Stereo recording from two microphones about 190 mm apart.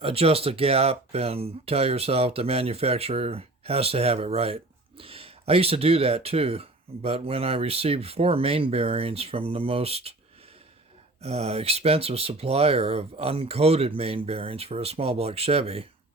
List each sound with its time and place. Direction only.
0.0 s speech: 30° right (ahead or behind)
11.2 s speech: 35° right (ahead or behind)